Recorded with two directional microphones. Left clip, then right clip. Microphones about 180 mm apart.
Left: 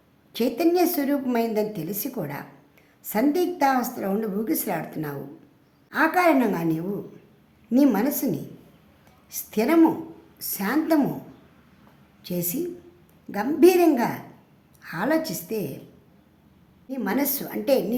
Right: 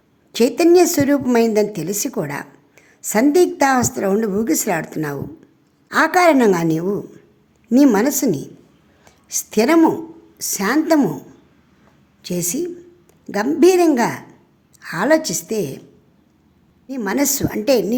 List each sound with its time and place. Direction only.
0.3 s a woman's voice: 45° right (ahead or behind)
12.2 s a woman's voice: 45° right (ahead or behind)
16.9 s a woman's voice: 40° right (ahead or behind)